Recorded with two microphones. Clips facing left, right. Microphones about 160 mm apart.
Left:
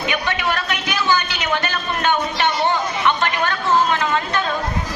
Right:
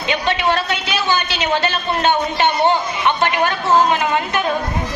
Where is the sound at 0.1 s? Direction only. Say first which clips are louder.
Right 7 dB; 25° right (ahead or behind).